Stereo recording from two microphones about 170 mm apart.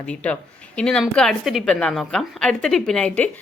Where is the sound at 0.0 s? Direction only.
5° left (ahead or behind).